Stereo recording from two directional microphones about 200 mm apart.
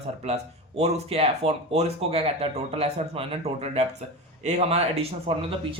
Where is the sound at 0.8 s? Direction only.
30° right (ahead or behind).